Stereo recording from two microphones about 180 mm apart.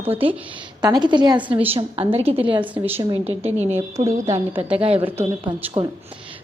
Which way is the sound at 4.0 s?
40° right (ahead or behind).